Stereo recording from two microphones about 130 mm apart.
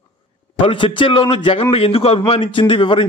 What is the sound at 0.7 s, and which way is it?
A man's voice, 40° left (ahead or behind).